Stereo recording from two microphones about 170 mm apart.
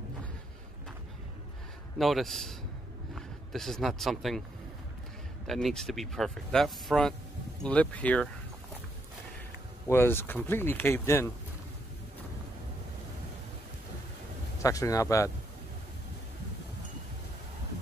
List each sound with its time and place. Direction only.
2.0 s speech: centre (ahead or behind)
5.5 s speech: centre (ahead or behind)
9.8 s speech: 15° left (ahead or behind)
14.6 s speech: 20° left (ahead or behind)